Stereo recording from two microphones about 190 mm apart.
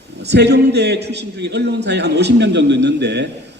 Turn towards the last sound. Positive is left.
turn(degrees=-65)  # may be behind; listen again after turning